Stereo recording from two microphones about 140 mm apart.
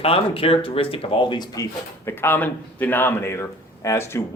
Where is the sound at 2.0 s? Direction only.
15° left (ahead or behind).